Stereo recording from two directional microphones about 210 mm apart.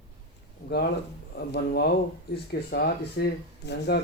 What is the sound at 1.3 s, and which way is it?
Speech, 50° left (ahead or behind).